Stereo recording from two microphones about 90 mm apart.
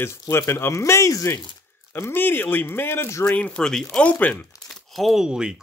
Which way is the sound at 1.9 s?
25° left (ahead or behind).